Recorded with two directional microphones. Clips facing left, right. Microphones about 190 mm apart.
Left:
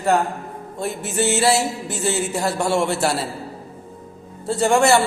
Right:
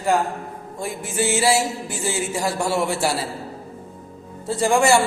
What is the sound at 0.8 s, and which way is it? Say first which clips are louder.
Music: left 2 dB; 10° right (ahead or behind).